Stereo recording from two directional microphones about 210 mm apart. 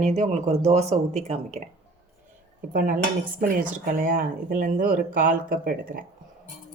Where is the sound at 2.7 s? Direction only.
40° right (ahead or behind).